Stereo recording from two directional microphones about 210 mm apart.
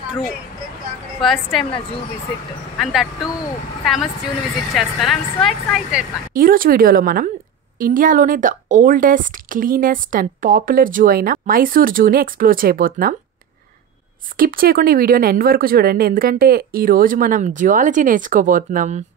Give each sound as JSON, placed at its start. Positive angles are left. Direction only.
{"t": 1.2, "sound": "speech", "side_deg": 0}
{"t": 2.8, "sound": "speech", "side_deg": 0}
{"t": 6.3, "sound": "speech", "side_deg": -40}
{"t": 14.3, "sound": "speech", "side_deg": -45}